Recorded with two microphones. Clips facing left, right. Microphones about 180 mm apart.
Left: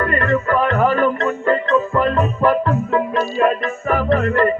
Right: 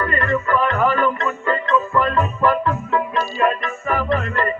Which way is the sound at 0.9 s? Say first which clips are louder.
Left 3 dB; 35° left (ahead or behind).